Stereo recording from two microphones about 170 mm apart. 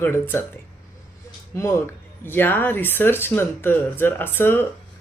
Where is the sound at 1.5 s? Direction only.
15° left (ahead or behind).